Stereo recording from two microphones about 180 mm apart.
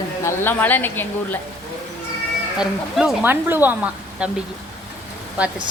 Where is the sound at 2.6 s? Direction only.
5° right (ahead or behind).